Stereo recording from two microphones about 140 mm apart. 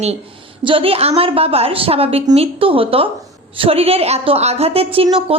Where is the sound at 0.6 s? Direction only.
40° right (ahead or behind).